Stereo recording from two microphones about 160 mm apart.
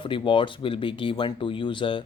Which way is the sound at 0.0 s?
30° left (ahead or behind).